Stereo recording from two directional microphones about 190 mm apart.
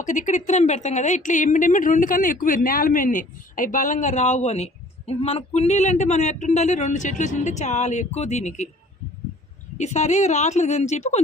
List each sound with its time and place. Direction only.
0.0 s a woman's voice: 40° left (ahead or behind)
9.7 s a woman's voice: 35° left (ahead or behind)